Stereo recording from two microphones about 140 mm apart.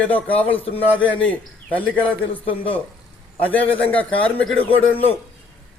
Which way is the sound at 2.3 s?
40° left (ahead or behind).